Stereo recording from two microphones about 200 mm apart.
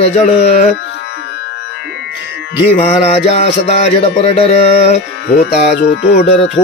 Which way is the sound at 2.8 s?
30° left (ahead or behind).